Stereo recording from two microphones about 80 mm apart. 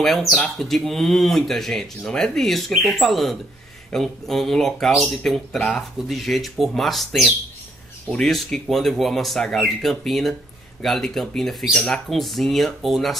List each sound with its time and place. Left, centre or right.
0.0 s speech: centre